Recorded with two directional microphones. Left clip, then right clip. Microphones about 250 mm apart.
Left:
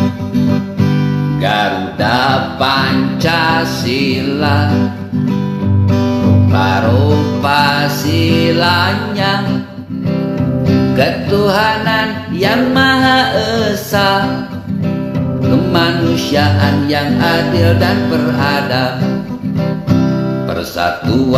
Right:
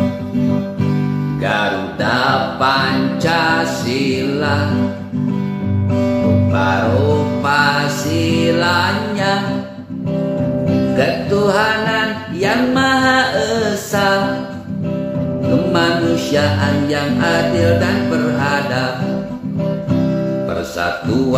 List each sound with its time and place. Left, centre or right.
2.6 s music: centre
7.4 s music: centre
11.0 s music: centre